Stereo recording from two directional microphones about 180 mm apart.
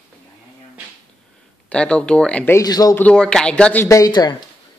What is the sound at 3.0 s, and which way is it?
Speech, 5° left (ahead or behind).